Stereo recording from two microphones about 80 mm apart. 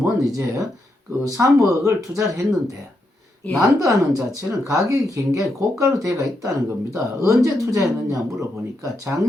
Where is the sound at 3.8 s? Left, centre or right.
Right.